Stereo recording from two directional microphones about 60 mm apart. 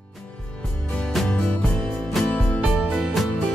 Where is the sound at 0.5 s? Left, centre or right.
Centre.